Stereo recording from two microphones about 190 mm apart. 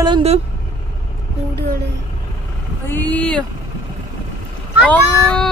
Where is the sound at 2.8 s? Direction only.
10° left (ahead or behind).